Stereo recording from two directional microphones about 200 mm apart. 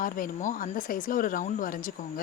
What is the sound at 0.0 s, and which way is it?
Speech, 45° left (ahead or behind).